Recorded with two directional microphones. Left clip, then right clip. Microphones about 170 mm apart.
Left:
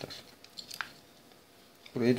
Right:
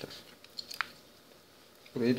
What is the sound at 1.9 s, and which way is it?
Speech, 20° left (ahead or behind).